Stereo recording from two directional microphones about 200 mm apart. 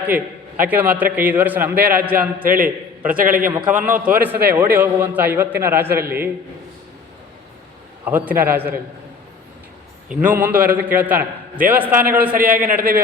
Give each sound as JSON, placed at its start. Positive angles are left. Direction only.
{"t": 0.0, "sound": "a man's voice", "side_deg": -10}
{"t": 2.4, "sound": "a man's voice", "side_deg": -45}
{"t": 3.7, "sound": "a man's voice", "side_deg": -10}
{"t": 8.0, "sound": "a man's voice", "side_deg": -10}
{"t": 10.1, "sound": "a man's voice", "side_deg": -5}
{"t": 12.3, "sound": "a man's voice", "side_deg": -45}